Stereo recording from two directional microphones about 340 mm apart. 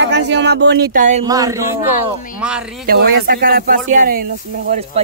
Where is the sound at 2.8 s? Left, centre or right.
Right.